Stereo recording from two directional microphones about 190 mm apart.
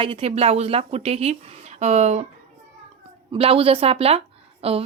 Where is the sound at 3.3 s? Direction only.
30° right (ahead or behind).